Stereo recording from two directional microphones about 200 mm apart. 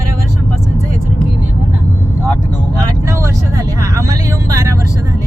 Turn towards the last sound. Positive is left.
turn(degrees=-15)  # may be behind; listen again after turning